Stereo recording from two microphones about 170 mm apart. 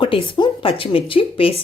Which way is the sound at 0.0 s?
30° left (ahead or behind).